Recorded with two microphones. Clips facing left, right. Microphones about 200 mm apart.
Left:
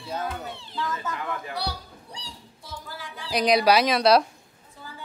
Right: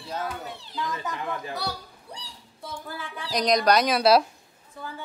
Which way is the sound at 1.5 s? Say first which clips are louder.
Left 1 dB; 50° right (ahead or behind).